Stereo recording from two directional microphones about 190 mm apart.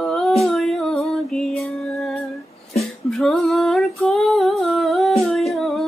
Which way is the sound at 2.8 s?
Centre (ahead or behind).